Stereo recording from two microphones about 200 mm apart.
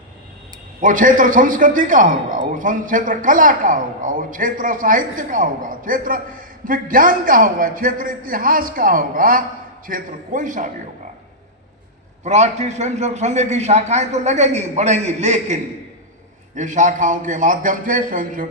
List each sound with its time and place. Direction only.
0.8 s a man's voice: 40° right (ahead or behind)
12.2 s a man's voice: 35° right (ahead or behind)
16.6 s a man's voice: 40° right (ahead or behind)